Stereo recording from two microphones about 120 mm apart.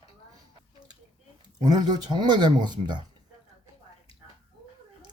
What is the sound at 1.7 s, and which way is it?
Speech, 35° right (ahead or behind).